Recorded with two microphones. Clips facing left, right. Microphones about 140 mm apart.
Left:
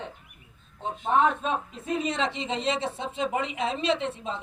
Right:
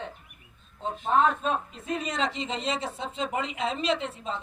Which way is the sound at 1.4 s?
Centre (ahead or behind).